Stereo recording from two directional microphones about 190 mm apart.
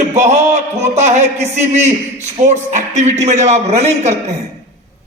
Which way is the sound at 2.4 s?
40° right (ahead or behind).